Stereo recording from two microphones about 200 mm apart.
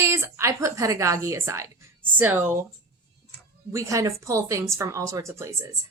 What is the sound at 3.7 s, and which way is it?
Speech, 15° right (ahead or behind).